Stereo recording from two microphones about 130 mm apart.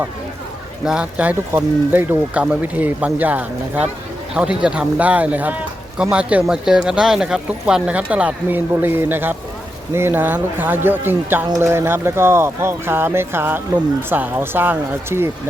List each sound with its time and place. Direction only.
0.9 s speech: 10° right (ahead or behind)